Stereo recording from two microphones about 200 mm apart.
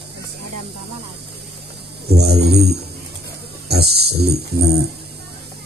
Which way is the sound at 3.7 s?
55° right (ahead or behind).